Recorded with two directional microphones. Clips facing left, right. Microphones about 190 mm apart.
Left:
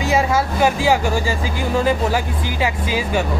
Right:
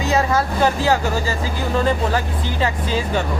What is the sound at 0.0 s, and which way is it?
Speech, 10° left (ahead or behind).